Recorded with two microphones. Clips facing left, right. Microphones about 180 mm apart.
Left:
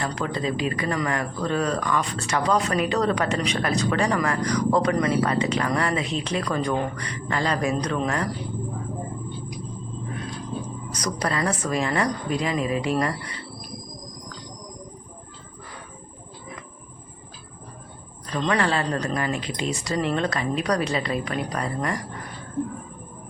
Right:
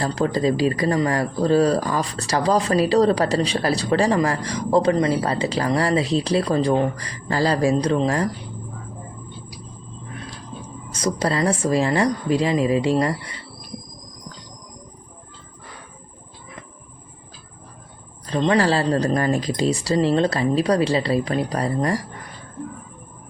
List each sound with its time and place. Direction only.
0.0 s speech: 35° right (ahead or behind)
10.9 s a woman's voice: 30° right (ahead or behind)
18.3 s speech: 30° right (ahead or behind)